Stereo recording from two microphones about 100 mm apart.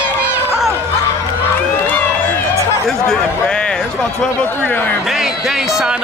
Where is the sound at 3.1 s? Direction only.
10° left (ahead or behind).